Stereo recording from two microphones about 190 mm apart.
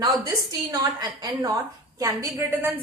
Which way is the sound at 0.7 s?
20° right (ahead or behind).